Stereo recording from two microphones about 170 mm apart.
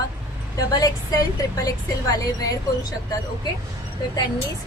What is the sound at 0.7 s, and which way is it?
Speech, 20° left (ahead or behind).